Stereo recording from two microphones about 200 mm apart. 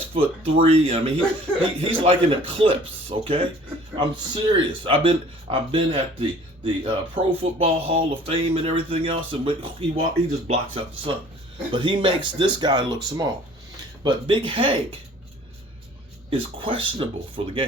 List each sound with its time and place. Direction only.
0.1 s speech: 30° right (ahead or behind)
16.3 s speech: 25° right (ahead or behind)